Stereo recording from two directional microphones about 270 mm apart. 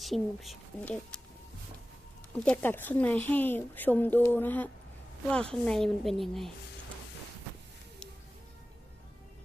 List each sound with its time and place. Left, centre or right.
0.0 s speech: centre
2.3 s speech: centre